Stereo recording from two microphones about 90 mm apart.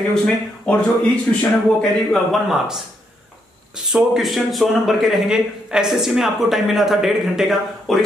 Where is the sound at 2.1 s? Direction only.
Centre (ahead or behind).